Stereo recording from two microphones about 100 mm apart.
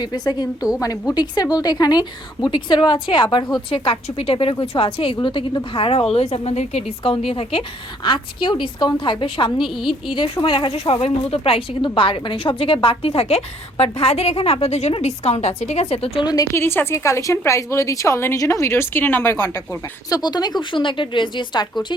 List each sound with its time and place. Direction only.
0.0 s a woman's voice: 40° left (ahead or behind)
5.7 s a woman's voice: 65° left (ahead or behind)
8.0 s a woman's voice: 55° left (ahead or behind)
9.6 s a woman's voice: centre (ahead or behind)
10.2 s speech: 50° left (ahead or behind); by 16.2 s 80° left
16.2 s a woman's voice: 40° left (ahead or behind)
16.5 s a woman's voice: 25° left (ahead or behind)
20.1 s a woman's voice: 40° left (ahead or behind)